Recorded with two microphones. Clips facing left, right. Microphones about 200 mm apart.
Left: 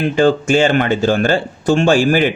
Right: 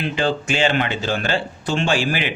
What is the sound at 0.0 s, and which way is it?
Speech, 45° left (ahead or behind).